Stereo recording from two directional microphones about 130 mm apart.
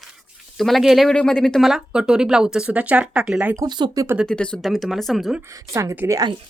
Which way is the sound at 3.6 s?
35° right (ahead or behind).